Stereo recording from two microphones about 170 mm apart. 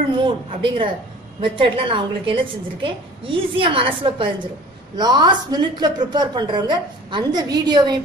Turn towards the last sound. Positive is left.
turn(degrees=-25)  # may be behind; listen again after turning